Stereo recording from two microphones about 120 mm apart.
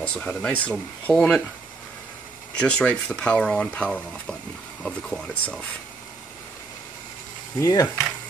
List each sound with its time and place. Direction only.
0.0 s speech: 10° left (ahead or behind)
2.6 s speech: 10° left (ahead or behind)
7.6 s speech: 30° left (ahead or behind)